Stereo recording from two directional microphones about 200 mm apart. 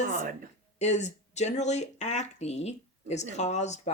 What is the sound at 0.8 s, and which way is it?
Speech, 35° left (ahead or behind).